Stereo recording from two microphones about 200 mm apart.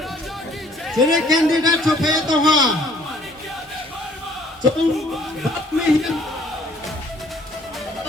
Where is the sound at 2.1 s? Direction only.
20° right (ahead or behind).